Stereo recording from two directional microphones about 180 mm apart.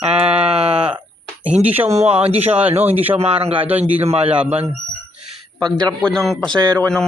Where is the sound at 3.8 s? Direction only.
35° right (ahead or behind).